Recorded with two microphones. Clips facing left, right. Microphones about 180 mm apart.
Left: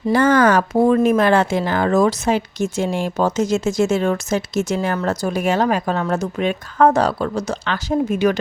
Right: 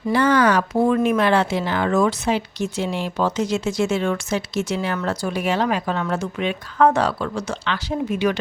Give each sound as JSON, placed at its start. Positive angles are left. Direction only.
{"t": 0.1, "sound": "speech", "side_deg": 45}